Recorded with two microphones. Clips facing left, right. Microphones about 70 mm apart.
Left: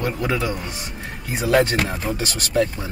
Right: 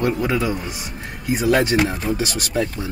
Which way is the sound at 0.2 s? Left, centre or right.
Centre.